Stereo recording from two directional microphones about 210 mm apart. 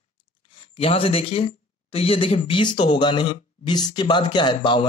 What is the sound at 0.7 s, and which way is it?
Speech, 25° left (ahead or behind).